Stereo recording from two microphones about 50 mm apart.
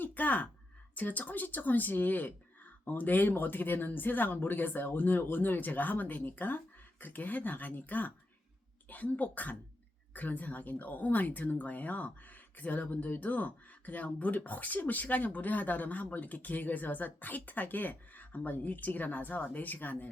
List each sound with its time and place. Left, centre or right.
0.0 s speech: left